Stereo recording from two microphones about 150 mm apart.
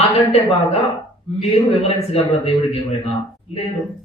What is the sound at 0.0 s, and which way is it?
Speech, 45° left (ahead or behind).